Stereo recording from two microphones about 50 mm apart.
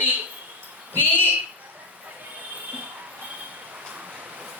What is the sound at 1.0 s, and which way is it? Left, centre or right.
Speech, left.